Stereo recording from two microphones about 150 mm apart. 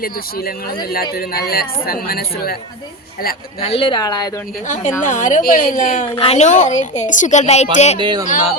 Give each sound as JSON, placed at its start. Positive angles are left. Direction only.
{"t": 0.0, "sound": "speech", "side_deg": 80}
{"t": 3.6, "sound": "speech", "side_deg": 40}
{"t": 4.6, "sound": "a woman's voice", "side_deg": 55}
{"t": 6.1, "sound": "speech", "side_deg": 45}
{"t": 7.9, "sound": "speech", "side_deg": -30}